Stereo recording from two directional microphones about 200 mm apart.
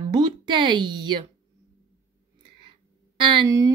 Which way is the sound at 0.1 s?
25° right (ahead or behind).